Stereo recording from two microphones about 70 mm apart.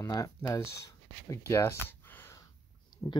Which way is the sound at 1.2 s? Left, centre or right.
Left.